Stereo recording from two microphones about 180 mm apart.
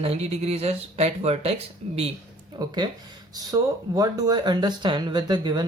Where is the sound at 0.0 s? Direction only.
35° right (ahead or behind).